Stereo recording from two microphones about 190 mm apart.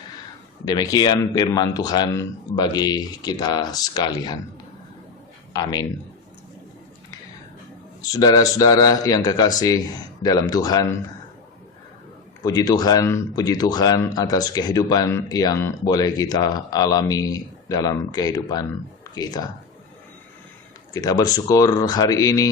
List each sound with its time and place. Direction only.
0.6 s speech: 20° left (ahead or behind)
5.5 s speech: 20° left (ahead or behind)
8.1 s speech: 20° left (ahead or behind)
12.4 s speech: 20° left (ahead or behind)
20.9 s speech: 20° left (ahead or behind)